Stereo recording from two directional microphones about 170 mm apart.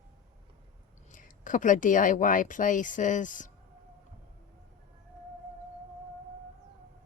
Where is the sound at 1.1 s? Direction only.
50° left (ahead or behind).